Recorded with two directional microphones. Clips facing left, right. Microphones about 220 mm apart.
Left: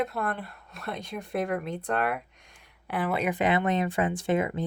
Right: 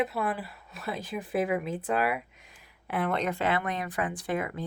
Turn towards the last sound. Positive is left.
turn(degrees=25)  # may be behind; listen again after turning